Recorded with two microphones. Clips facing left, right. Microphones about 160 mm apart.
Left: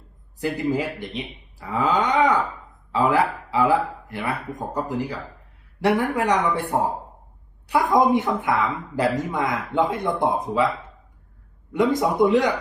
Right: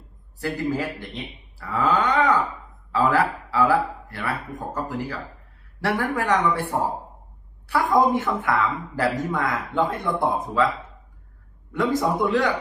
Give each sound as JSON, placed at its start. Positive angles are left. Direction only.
{"t": 0.3, "sound": "speech", "side_deg": 15}
{"t": 11.7, "sound": "speech", "side_deg": 20}